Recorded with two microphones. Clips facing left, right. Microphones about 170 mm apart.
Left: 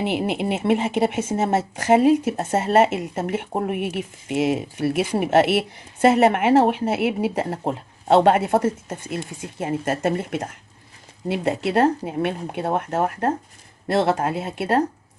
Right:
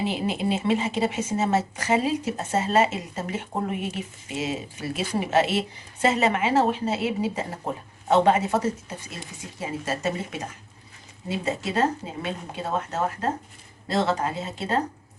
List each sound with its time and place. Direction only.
0.0 s a woman's voice: 60° left (ahead or behind)